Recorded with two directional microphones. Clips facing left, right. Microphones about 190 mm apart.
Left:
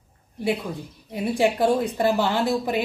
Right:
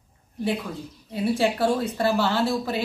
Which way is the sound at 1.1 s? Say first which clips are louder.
Left 1 dB; 15° left (ahead or behind).